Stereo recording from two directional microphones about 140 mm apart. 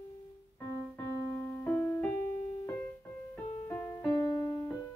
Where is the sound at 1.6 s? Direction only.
15° left (ahead or behind).